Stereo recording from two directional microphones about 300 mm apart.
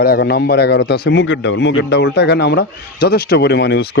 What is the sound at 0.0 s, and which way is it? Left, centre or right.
A man's voice, left.